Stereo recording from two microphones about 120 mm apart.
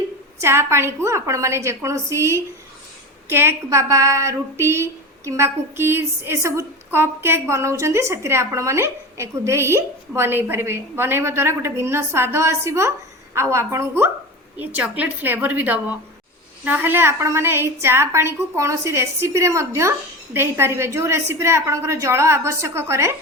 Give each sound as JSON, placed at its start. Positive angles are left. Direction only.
{"t": 0.4, "sound": "a woman's voice", "side_deg": -20}